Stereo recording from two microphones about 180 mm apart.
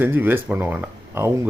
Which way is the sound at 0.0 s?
10° right (ahead or behind).